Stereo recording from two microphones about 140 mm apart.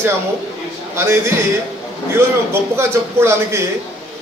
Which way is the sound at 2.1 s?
20° right (ahead or behind).